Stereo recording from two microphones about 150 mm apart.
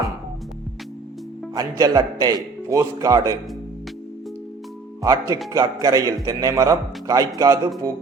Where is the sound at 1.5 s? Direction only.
25° right (ahead or behind).